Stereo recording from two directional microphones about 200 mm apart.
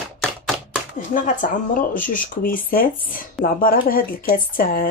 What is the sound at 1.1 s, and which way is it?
Speech, 40° left (ahead or behind).